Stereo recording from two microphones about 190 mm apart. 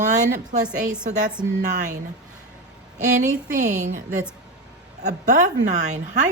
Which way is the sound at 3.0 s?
40° right (ahead or behind).